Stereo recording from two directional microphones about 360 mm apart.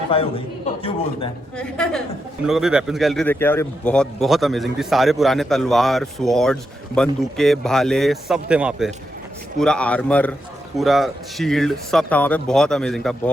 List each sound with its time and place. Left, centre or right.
0.1 s a man's voice: centre
1.5 s a man's voice: centre